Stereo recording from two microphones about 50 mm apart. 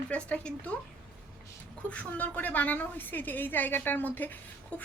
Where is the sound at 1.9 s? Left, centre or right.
Left.